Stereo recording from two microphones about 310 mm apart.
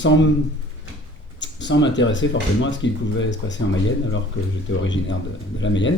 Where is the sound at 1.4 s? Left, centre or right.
Left.